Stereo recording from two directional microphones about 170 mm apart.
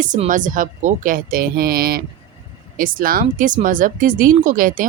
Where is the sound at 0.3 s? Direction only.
50° right (ahead or behind).